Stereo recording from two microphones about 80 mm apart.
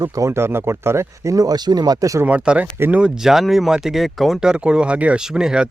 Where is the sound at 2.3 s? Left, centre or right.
Centre.